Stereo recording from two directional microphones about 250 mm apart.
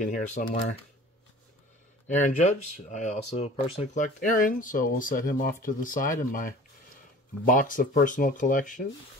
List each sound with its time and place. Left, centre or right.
0.0 s speech: left
2.0 s speech: left